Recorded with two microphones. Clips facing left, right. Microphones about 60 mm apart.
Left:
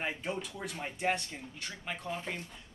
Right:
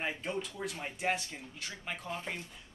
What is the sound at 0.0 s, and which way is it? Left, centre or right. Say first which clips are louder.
A man's voice: even; centre.